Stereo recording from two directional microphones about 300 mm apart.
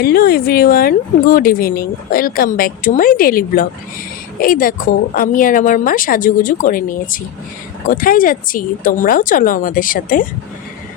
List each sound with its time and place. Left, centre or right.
0.0 s speech: left